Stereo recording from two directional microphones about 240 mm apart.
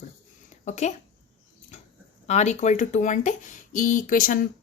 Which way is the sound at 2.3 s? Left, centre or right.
Left.